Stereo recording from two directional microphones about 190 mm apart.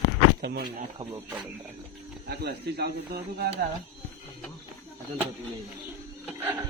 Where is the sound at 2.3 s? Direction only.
60° right (ahead or behind).